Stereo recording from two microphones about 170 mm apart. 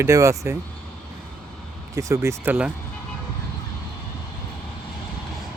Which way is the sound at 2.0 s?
20° right (ahead or behind).